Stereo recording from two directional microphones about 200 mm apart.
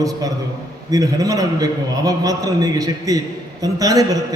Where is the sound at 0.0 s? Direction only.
20° right (ahead or behind).